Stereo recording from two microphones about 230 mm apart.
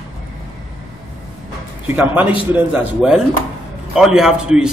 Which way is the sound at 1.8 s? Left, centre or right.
Centre.